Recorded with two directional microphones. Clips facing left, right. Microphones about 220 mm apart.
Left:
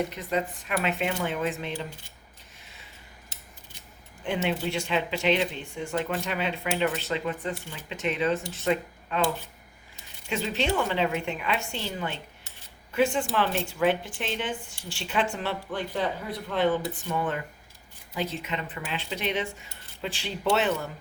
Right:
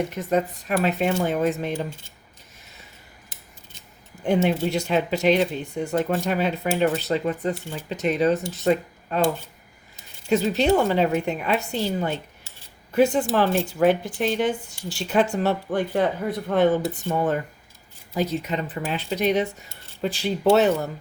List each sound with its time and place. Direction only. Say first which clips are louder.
0.1 s speech: right 6 dB; 45° right (ahead or behind)
4.2 s speech: right 7 dB; 40° right (ahead or behind)
10.2 s speech: right 8 dB; 40° right (ahead or behind)